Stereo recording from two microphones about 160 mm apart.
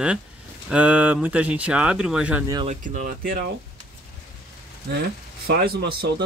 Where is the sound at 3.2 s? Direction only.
65° right (ahead or behind).